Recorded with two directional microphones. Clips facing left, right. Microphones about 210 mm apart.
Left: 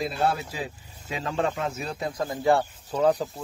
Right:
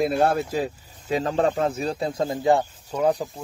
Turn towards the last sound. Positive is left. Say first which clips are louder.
# even
turn(degrees=-10)  # may be behind; listen again after turning